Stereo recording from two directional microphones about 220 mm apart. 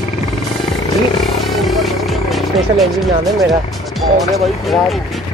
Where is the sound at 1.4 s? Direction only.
Centre (ahead or behind).